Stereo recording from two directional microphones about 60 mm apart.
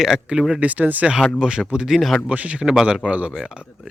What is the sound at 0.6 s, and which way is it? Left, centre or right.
Speech, right.